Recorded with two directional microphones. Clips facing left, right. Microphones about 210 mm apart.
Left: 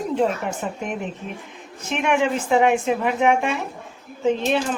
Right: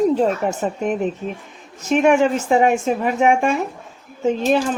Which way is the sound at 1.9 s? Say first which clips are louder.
Right 6 dB; 40° right (ahead or behind).